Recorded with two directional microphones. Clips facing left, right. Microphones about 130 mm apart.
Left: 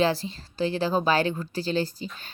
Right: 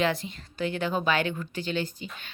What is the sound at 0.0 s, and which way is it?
A woman's voice, 35° left (ahead or behind).